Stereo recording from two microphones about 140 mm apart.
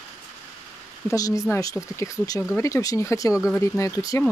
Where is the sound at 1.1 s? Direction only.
25° left (ahead or behind).